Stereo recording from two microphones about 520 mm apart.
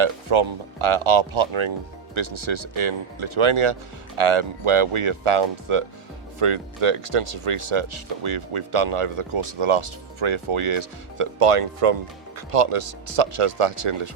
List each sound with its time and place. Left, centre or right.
0.0 s speech: right